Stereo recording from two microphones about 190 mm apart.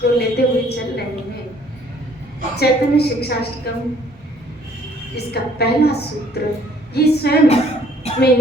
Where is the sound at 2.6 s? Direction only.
60° left (ahead or behind).